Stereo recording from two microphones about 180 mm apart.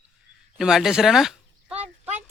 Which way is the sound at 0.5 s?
5° right (ahead or behind).